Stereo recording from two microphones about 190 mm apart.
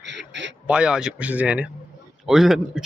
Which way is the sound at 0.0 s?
70° right (ahead or behind).